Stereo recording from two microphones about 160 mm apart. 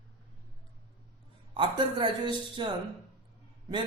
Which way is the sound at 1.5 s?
30° right (ahead or behind).